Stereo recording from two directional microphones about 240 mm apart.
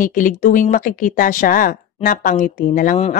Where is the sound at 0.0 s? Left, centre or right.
Left.